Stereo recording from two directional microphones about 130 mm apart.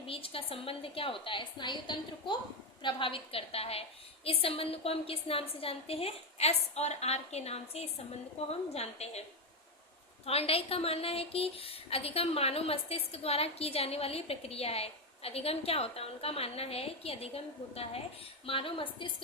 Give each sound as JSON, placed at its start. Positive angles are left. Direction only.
{"t": 0.1, "sound": "a woman's voice", "side_deg": 45}
{"t": 10.2, "sound": "a woman's voice", "side_deg": 50}